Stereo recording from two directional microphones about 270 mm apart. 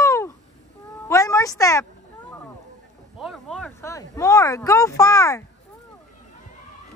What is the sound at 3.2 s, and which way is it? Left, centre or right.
Speech, centre.